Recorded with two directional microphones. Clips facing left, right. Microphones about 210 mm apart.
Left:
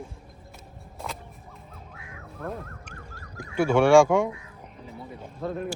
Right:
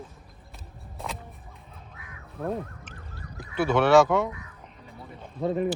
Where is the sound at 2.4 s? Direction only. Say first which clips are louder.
Right 5 dB; centre (ahead or behind).